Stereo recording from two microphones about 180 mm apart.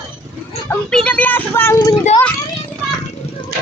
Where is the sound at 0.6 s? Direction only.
5° left (ahead or behind).